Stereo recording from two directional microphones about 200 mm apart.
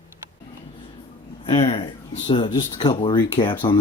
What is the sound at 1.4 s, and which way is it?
Speech, 30° left (ahead or behind).